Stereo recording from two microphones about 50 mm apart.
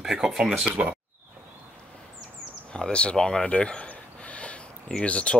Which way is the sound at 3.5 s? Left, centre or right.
Left.